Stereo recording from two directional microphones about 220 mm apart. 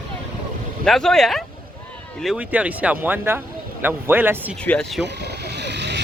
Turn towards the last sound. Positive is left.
turn(degrees=-50)  # may be behind; listen again after turning